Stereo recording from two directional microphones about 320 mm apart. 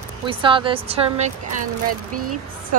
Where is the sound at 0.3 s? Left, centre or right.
Centre.